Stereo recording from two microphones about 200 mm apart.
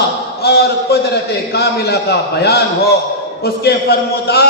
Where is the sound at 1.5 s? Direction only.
55° left (ahead or behind).